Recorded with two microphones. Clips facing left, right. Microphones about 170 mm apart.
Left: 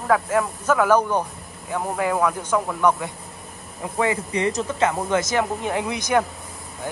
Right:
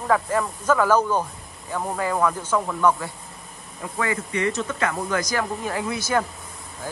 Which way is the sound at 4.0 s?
25° left (ahead or behind).